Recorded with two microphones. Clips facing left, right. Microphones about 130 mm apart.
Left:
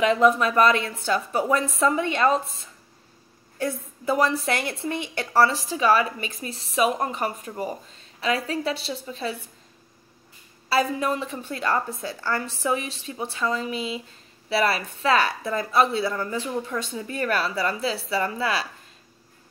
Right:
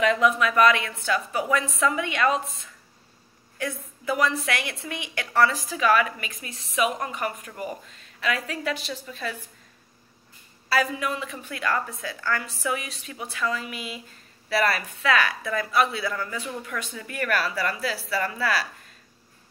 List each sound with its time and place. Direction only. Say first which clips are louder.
0.0 s a woman's voice: left 3 dB; 35° left (ahead or behind)
10.7 s a woman's voice: left 2 dB; 30° left (ahead or behind)